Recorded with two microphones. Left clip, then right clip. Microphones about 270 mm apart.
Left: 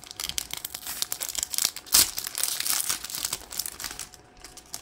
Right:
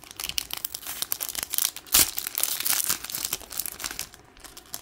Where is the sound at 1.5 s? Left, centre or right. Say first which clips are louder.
Left 1 dB; centre.